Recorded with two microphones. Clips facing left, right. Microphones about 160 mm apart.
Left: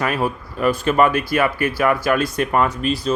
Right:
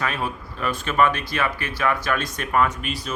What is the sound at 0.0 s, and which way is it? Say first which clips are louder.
Speech: left 6 dB; 45° left (ahead or behind).